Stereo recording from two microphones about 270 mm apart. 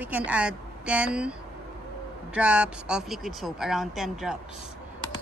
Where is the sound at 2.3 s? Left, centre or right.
Centre.